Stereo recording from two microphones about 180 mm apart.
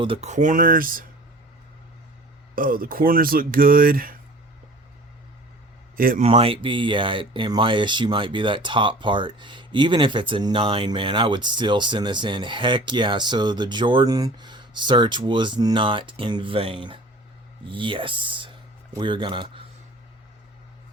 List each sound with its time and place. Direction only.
0.0 s speech: 35° right (ahead or behind); by 1.0 s 50° right (ahead or behind)
2.6 s speech: 50° right (ahead or behind)
6.0 s speech: 50° right (ahead or behind)
6.2 s speech: 30° right (ahead or behind)